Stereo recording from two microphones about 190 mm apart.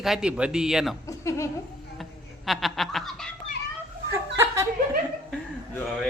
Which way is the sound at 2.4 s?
Centre (ahead or behind).